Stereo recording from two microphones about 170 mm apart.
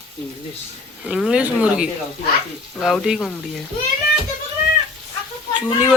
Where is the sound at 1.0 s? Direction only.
5° right (ahead or behind).